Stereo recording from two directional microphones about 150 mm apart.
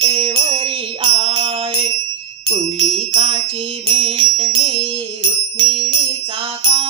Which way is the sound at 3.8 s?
40° right (ahead or behind).